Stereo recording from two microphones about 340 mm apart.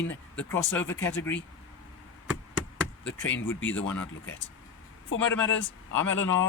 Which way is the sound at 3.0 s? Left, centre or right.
Left.